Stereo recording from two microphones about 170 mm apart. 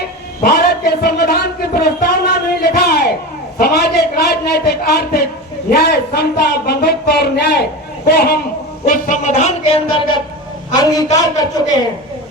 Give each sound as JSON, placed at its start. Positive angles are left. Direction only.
{"t": 0.4, "sound": "a sound", "side_deg": 65}
{"t": 3.6, "sound": "speech", "side_deg": 70}
{"t": 8.9, "sound": "speech", "side_deg": 45}
{"t": 10.8, "sound": "a man's voice", "side_deg": 20}